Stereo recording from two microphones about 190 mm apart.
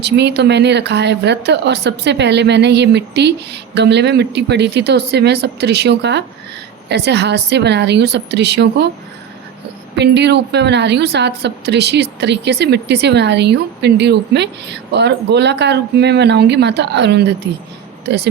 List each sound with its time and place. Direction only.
0.0 s a woman's voice: 65° right (ahead or behind)
9.9 s a woman's voice: 65° right (ahead or behind)